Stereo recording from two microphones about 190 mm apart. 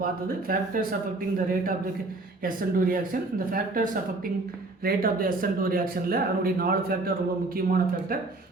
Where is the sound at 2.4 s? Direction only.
50° right (ahead or behind).